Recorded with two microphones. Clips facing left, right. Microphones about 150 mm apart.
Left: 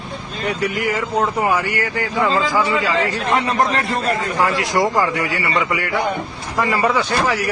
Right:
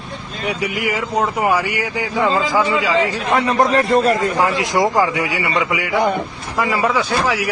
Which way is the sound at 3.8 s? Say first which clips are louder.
Right 6 dB; 40° right (ahead or behind).